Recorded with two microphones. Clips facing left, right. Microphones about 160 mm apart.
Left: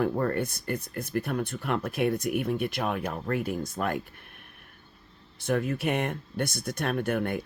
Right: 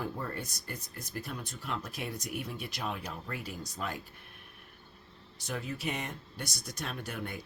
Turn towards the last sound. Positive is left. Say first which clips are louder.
# left 12 dB
turn(degrees=55)  # may be behind; listen again after turning